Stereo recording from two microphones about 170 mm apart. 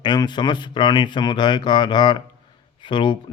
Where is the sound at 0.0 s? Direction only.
25° left (ahead or behind).